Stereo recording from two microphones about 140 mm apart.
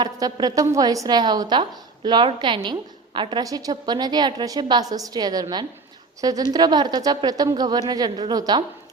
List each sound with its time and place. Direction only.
0.0 s a woman's voice: 30° right (ahead or behind)